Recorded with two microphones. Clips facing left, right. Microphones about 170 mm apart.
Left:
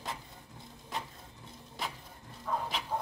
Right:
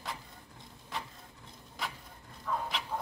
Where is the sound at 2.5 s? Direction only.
35° left (ahead or behind).